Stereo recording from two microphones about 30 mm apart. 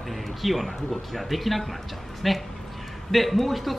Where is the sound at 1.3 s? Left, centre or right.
Centre.